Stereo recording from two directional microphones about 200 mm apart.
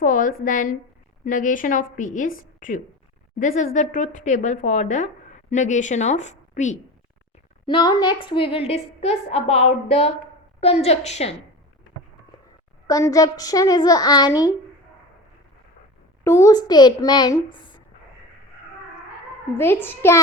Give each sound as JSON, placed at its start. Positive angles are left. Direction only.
{"t": 0.0, "sound": "a woman's voice", "side_deg": 40}
{"t": 7.7, "sound": "a woman's voice", "side_deg": 20}
{"t": 12.9, "sound": "a woman's voice", "side_deg": 15}
{"t": 16.2, "sound": "a woman's voice", "side_deg": 15}
{"t": 19.5, "sound": "a woman's voice", "side_deg": 10}